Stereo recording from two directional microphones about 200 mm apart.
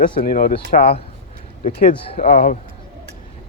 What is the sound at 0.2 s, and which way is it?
Speech, 45° left (ahead or behind).